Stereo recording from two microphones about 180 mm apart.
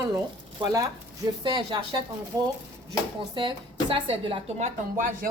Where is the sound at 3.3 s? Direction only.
25° right (ahead or behind); by 5.3 s 50° right (ahead or behind).